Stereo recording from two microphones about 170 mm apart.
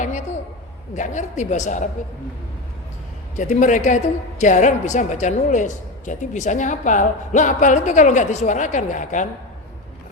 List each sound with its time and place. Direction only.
0.9 s a woman's voice: 45° left (ahead or behind)
3.3 s a woman's voice: 45° left (ahead or behind)